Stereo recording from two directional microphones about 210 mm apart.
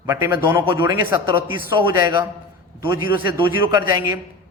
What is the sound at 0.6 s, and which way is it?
A man's voice, 20° right (ahead or behind).